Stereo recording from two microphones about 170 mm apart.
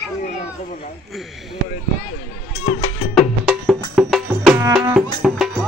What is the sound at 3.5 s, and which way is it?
Music, centre (ahead or behind).